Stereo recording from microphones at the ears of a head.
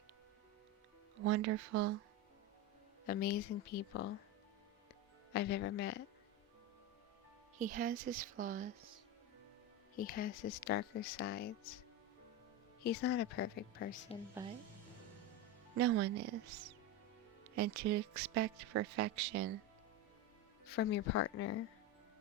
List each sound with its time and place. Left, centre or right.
1.1 s speech: right
3.1 s speech: left
5.3 s speech: left
7.6 s speech: right
9.9 s speech: left
12.8 s speech: left
15.7 s speech: right
20.7 s speech: left